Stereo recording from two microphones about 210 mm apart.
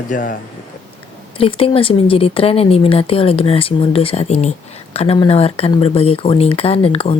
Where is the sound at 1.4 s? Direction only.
25° left (ahead or behind).